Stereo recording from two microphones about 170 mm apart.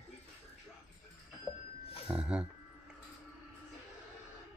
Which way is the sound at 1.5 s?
5° right (ahead or behind).